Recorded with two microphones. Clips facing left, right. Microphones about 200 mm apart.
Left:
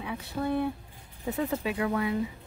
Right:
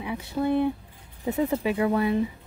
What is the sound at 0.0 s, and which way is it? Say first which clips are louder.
Speech: right 5 dB; 15° right (ahead or behind).